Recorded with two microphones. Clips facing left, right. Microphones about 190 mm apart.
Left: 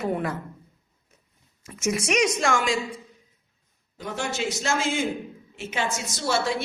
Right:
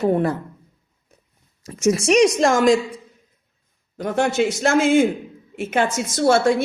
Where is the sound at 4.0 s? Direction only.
55° right (ahead or behind).